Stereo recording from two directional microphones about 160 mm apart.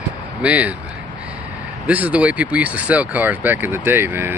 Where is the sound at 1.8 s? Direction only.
10° right (ahead or behind).